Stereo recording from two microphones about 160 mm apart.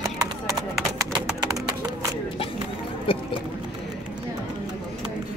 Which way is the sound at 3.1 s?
35° left (ahead or behind).